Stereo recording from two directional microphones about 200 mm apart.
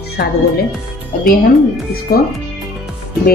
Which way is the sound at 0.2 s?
55° left (ahead or behind).